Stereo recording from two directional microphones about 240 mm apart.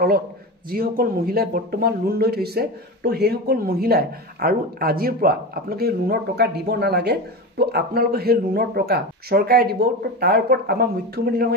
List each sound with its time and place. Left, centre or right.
0.7 s speech: right